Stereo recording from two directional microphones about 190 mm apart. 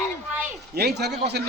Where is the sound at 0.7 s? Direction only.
60° right (ahead or behind).